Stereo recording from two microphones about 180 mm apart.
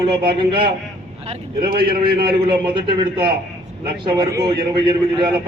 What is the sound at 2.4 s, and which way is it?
A man's voice, 25° right (ahead or behind).